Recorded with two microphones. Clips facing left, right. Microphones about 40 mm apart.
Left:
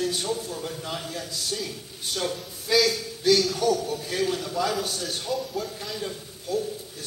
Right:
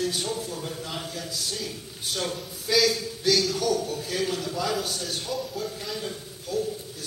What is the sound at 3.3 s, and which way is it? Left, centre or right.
A man's voice, centre.